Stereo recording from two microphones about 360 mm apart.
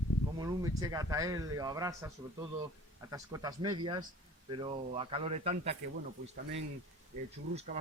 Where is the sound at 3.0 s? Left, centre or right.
Centre.